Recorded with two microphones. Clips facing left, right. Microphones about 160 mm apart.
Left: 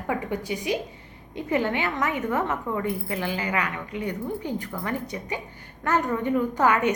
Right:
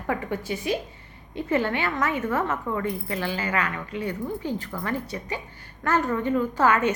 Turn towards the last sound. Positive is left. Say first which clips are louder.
# even
turn(degrees=20)  # may be behind; listen again after turning